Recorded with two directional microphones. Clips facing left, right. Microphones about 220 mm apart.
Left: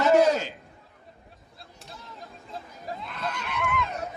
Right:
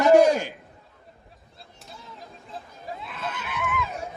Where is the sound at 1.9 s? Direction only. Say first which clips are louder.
Even; centre (ahead or behind).